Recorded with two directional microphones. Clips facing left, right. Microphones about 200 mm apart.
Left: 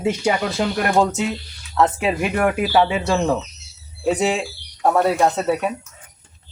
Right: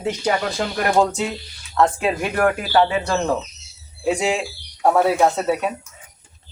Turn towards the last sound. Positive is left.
turn(degrees=0)  # may be behind; listen again after turning